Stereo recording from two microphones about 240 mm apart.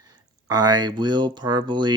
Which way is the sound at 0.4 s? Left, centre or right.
Centre.